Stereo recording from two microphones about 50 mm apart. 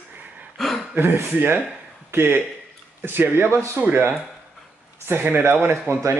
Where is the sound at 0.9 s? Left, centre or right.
Right.